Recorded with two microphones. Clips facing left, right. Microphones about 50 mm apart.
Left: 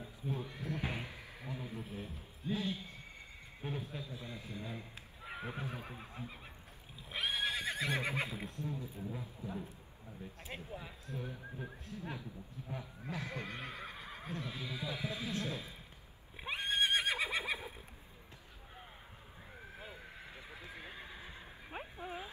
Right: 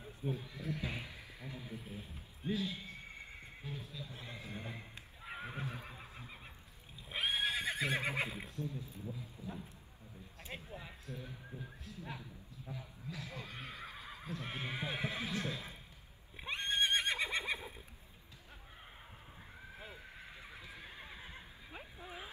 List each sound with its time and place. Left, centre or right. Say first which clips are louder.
0.4 s a sound: left 2 dB; left
2.4 s speech: even; right
3.6 s speech: left 7 dB; left
4.0 s speech: left 2 dB; right
5.2 s neigh: left 2 dB; centre
5.7 s neigh: left 2 dB; left
7.1 s neigh: right 1 dB; centre
8.5 s speech: left 1 dB; left
10.5 s speech: left 1 dB; centre
11.1 s speech: left 5 dB; left
14.4 s speech: right 3 dB; right
16.3 s neigh: left 1 dB; centre
20.6 s horse: left 2 dB; left
21.6 s a sound: left 7 dB; left